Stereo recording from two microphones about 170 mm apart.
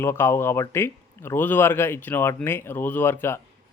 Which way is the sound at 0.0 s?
15° left (ahead or behind).